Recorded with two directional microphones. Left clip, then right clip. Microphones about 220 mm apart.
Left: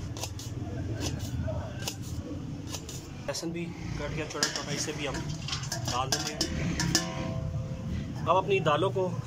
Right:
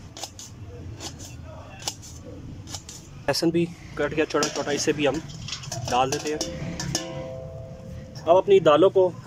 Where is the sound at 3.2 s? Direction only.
50° right (ahead or behind).